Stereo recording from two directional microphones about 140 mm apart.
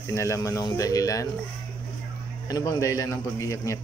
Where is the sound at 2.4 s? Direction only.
25° left (ahead or behind).